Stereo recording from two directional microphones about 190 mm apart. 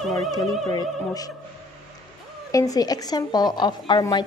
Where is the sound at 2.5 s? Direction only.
20° left (ahead or behind).